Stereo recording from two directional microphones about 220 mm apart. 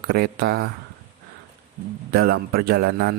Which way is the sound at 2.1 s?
45° right (ahead or behind).